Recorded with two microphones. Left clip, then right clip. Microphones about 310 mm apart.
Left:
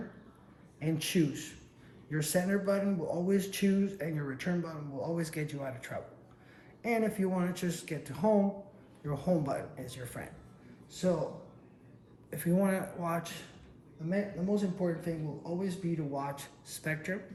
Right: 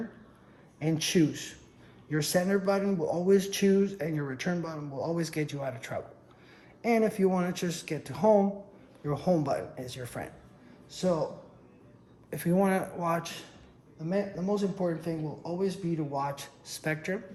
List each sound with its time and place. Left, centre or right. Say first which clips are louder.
0.8 s speech: right 5 dB; right
12.3 s speech: right 4 dB; right